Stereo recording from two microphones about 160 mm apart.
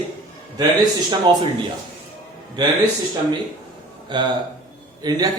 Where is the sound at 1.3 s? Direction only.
30° right (ahead or behind).